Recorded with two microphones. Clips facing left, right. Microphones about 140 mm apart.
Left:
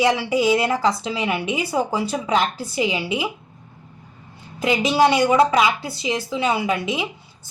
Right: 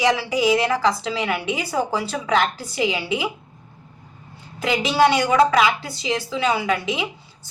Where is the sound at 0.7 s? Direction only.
20° left (ahead or behind).